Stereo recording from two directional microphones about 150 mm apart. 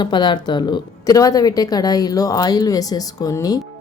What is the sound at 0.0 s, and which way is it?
Speech, 30° left (ahead or behind).